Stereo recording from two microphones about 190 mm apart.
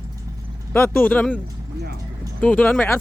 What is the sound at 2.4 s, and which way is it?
Speech, 10° left (ahead or behind).